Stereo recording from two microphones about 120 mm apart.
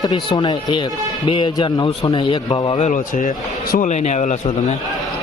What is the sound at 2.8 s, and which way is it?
Speech, 90° left.